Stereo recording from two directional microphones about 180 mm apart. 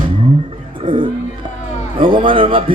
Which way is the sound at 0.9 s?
25° right (ahead or behind).